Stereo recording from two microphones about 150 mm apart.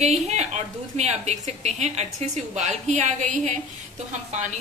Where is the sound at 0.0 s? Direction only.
50° right (ahead or behind).